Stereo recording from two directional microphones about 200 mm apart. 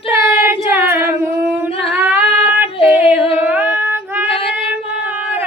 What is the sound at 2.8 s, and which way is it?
Female singing, 25° left (ahead or behind).